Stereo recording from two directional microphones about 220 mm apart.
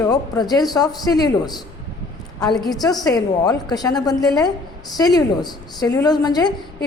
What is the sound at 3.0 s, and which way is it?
A woman's voice, 15° left (ahead or behind).